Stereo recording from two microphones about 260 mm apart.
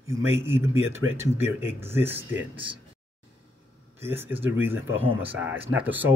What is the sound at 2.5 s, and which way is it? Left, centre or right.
Speech, centre.